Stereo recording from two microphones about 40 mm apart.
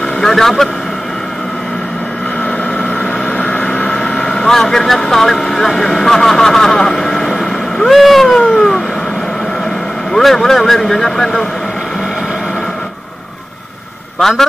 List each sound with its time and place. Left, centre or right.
0.2 s speech: centre
2.8 s vehicle: left
3.6 s speech: left; by 7.2 s centre
7.9 s cat: centre
8.4 s cat: centre
10.1 s speech: centre